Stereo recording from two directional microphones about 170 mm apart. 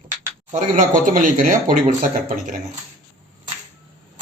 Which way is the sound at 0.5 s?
50° right (ahead or behind).